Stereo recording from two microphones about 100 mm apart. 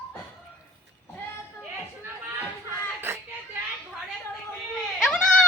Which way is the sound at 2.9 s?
25° right (ahead or behind).